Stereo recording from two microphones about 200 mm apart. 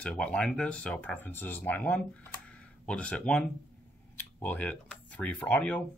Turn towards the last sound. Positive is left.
turn(degrees=10)  # may be behind; listen again after turning